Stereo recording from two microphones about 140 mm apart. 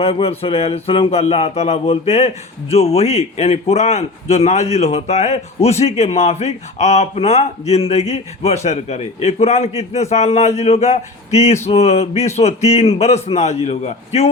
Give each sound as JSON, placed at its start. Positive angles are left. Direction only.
{"t": 0.0, "sound": "speech", "side_deg": 45}